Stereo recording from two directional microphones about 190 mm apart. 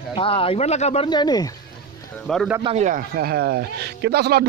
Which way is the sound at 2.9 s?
50° right (ahead or behind).